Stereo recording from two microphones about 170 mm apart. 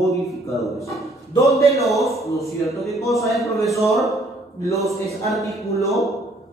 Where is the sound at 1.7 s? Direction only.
Centre (ahead or behind).